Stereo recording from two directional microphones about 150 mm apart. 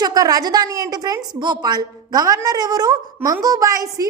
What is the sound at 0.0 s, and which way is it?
A woman's voice, 25° right (ahead or behind).